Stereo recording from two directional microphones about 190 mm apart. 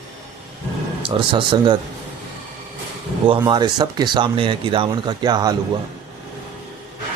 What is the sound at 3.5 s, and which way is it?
A man's voice, 20° right (ahead or behind).